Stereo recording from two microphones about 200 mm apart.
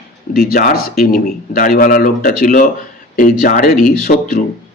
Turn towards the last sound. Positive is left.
turn(degrees=45)  # may be behind; listen again after turning